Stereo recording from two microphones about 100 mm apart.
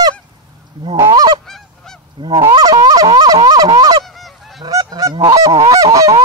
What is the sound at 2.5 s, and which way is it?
Fowl, 40° right (ahead or behind).